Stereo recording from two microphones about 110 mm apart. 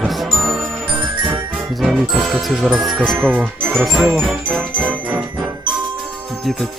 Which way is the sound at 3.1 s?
15° right (ahead or behind).